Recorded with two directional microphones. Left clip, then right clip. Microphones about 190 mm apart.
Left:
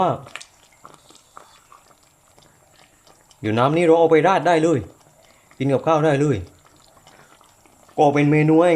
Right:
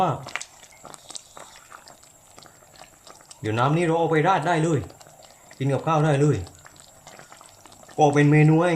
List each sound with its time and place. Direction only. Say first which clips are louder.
0.3 s a sound: right 4 dB; 5° right (ahead or behind)
3.4 s speech: left 6 dB; 45° left (ahead or behind)
7.9 s speech: left 2 dB; 45° left (ahead or behind)